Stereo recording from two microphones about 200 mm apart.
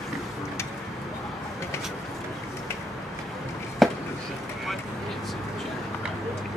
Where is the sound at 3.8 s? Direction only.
Centre (ahead or behind).